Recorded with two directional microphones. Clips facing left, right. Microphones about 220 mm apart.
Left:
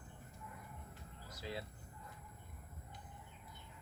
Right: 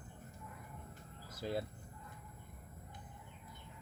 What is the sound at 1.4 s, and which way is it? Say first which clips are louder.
Speech: right 7 dB; 50° right (ahead or behind).